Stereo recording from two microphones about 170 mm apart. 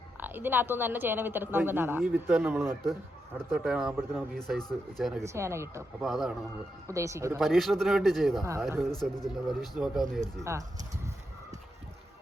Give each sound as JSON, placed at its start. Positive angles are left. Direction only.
{"t": 0.2, "sound": "speech", "side_deg": -10}
{"t": 5.2, "sound": "speech", "side_deg": -15}
{"t": 6.0, "sound": "speech", "side_deg": 0}
{"t": 6.8, "sound": "speech", "side_deg": -20}
{"t": 7.3, "sound": "speech", "side_deg": 0}
{"t": 8.4, "sound": "speech", "side_deg": -15}
{"t": 8.8, "sound": "speech", "side_deg": 0}